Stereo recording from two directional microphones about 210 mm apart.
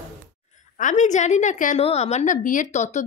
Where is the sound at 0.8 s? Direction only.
35° left (ahead or behind).